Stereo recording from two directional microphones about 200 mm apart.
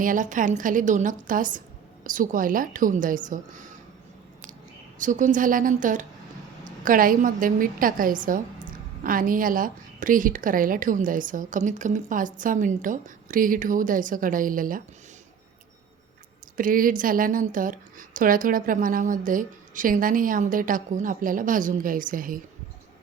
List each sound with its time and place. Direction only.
0.0 s a woman's voice: 40° right (ahead or behind)
4.9 s a woman's voice: 40° right (ahead or behind)
16.6 s a woman's voice: 45° right (ahead or behind)